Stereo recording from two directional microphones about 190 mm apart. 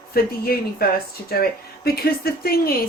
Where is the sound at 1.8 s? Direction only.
55° left (ahead or behind).